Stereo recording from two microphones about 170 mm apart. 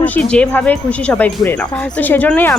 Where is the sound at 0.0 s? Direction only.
10° left (ahead or behind).